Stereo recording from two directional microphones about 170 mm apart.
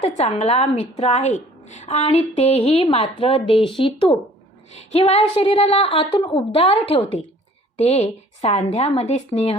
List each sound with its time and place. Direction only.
0.0 s a woman's voice: 40° left (ahead or behind)